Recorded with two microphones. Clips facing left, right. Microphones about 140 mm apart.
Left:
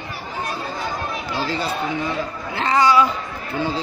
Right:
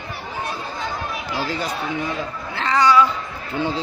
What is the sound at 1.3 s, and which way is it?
Speech, 10° right (ahead or behind).